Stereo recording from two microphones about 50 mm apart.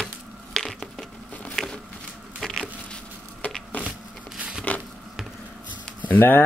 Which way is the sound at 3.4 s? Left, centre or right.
Left.